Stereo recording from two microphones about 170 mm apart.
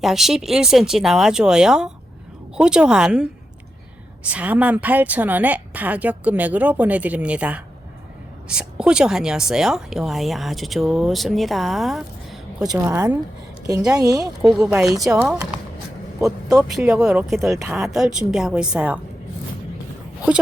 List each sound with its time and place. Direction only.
0.0 s a woman's voice: centre (ahead or behind)
12.6 s a woman's voice: 20° right (ahead or behind)
14.4 s a woman's voice: centre (ahead or behind); by 16.6 s 20° right (ahead or behind)
16.7 s speech: 5° right (ahead or behind)